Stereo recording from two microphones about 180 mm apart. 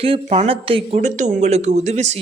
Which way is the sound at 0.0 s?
35° right (ahead or behind).